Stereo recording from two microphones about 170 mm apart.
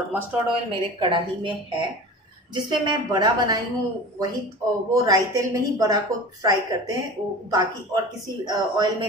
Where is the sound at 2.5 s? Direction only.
25° right (ahead or behind).